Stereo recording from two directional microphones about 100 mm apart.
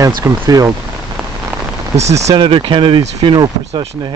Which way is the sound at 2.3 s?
55° right (ahead or behind).